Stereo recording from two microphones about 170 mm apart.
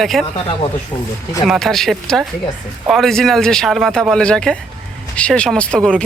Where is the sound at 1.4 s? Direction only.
Centre (ahead or behind).